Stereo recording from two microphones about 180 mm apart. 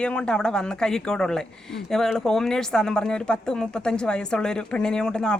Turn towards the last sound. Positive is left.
turn(degrees=5)  # may be behind; listen again after turning